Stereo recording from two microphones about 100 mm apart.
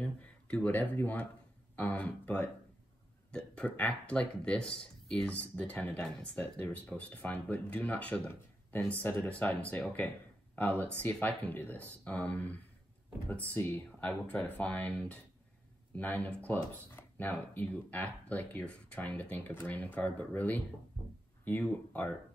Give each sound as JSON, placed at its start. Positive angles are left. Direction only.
{"t": 0.0, "sound": "speech", "side_deg": 10}